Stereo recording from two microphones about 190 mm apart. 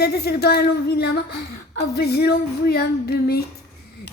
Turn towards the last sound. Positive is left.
turn(degrees=55)  # may be behind; listen again after turning